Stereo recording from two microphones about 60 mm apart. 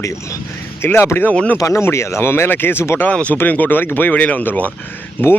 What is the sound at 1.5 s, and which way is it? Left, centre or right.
Speech, left.